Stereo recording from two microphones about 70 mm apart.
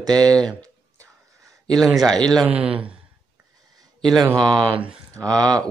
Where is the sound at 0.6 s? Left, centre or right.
Right.